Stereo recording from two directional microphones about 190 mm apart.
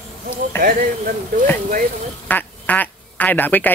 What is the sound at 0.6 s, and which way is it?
Speech, 50° right (ahead or behind).